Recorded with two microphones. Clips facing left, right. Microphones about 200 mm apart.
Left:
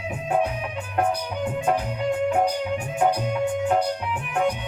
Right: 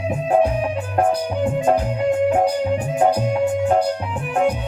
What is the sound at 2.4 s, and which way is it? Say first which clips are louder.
Music: right 5 dB; 35° right (ahead or behind).